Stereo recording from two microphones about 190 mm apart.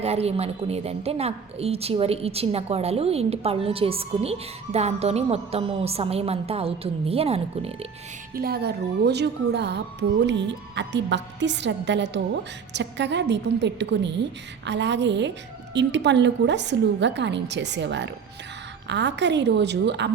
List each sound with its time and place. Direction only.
0.0 s a woman's voice: 35° right (ahead or behind)
8.4 s speech: 55° right (ahead or behind)